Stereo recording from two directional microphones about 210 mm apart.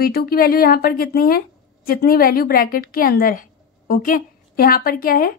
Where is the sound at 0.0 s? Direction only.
45° left (ahead or behind).